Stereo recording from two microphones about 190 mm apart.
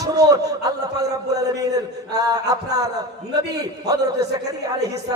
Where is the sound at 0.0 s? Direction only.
20° right (ahead or behind).